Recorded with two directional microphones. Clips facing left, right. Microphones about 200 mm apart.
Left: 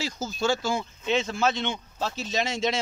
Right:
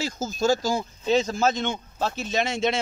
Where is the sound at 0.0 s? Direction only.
45° right (ahead or behind).